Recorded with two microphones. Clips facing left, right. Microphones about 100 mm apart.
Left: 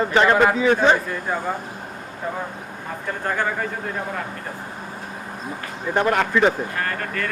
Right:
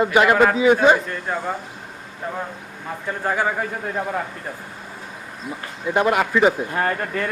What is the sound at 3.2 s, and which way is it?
Speech, 5° right (ahead or behind).